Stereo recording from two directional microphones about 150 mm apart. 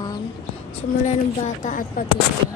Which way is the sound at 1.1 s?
55° left (ahead or behind).